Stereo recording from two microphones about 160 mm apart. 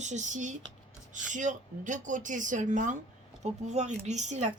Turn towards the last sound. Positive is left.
turn(degrees=-45)  # may be behind; listen again after turning